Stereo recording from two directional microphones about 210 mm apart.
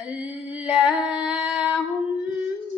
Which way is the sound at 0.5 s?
5° right (ahead or behind).